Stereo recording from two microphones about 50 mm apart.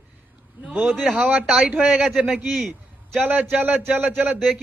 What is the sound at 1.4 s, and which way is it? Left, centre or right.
A man's voice, centre.